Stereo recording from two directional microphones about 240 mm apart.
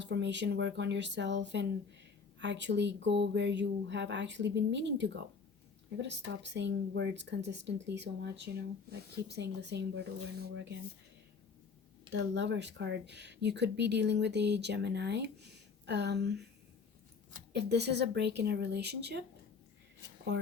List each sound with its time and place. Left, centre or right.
0.0 s speech: right
12.1 s speech: right
17.5 s speech: right